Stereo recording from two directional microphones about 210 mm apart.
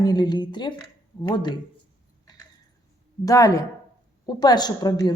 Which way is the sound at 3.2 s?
15° left (ahead or behind).